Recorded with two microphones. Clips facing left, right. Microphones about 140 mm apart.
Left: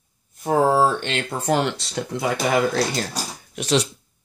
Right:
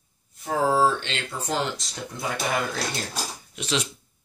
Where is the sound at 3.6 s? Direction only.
40° left (ahead or behind).